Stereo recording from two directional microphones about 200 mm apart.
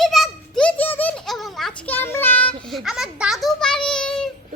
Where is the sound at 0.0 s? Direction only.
Centre (ahead or behind).